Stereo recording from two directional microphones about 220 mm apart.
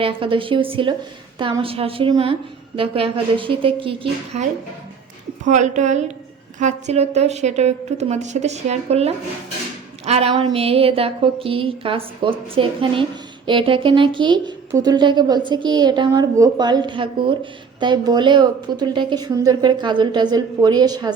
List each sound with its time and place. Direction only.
0.0 s speech: 25° right (ahead or behind)
5.5 s a woman's voice: 30° right (ahead or behind)